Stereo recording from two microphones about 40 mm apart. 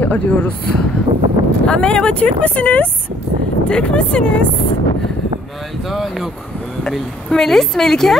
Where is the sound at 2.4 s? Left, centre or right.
Left.